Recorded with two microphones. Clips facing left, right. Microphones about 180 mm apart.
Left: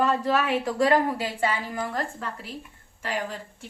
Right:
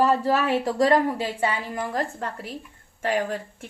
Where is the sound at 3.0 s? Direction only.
50° right (ahead or behind).